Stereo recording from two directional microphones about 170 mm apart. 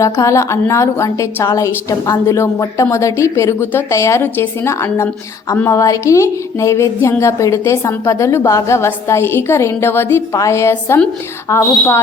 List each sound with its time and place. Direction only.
0.0 s a woman's voice: 20° left (ahead or behind)